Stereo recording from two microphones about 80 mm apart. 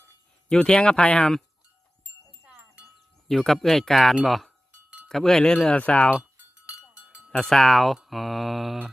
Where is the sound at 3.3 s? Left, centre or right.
Centre.